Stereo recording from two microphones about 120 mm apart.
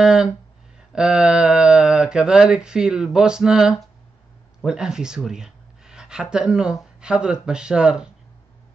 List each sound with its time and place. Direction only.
0.0 s speech: 5° right (ahead or behind)